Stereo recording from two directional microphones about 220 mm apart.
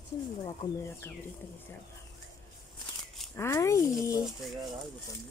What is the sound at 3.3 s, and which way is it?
Speech, 10° left (ahead or behind).